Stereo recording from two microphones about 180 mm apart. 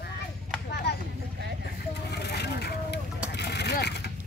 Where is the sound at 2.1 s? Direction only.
65° left (ahead or behind).